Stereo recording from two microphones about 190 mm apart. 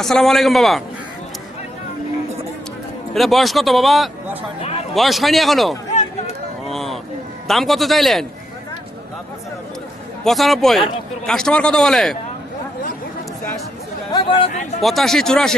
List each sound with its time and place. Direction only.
0.0 s a man's voice: centre (ahead or behind)
3.2 s a man's voice: centre (ahead or behind)
5.9 s a sound: 40° left (ahead or behind)
6.7 s a sound: centre (ahead or behind)
7.4 s a man's voice: centre (ahead or behind)
10.2 s a man's voice: centre (ahead or behind)
14.1 s speech: 25° left (ahead or behind)
14.8 s a man's voice: centre (ahead or behind)